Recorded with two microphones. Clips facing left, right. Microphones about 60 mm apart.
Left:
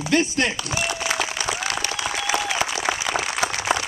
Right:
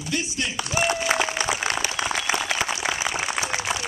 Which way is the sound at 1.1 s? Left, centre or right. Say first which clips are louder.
Right 2 dB; right.